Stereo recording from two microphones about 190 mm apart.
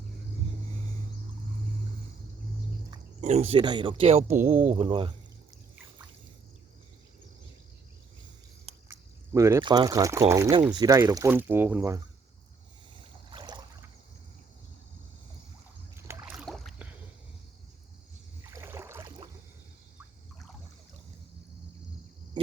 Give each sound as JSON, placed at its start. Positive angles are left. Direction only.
{"t": 3.2, "sound": "speech", "side_deg": -35}
{"t": 8.9, "sound": "speech", "side_deg": -15}
{"t": 13.3, "sound": "a sound", "side_deg": -20}
{"t": 16.0, "sound": "rowboat", "side_deg": -15}
{"t": 18.4, "sound": "rowboat", "side_deg": -15}